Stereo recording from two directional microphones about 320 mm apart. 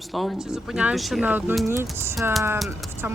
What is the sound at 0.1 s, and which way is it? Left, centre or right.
Speech, centre.